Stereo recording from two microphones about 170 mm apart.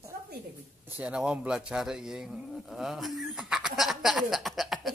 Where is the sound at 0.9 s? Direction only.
5° right (ahead or behind).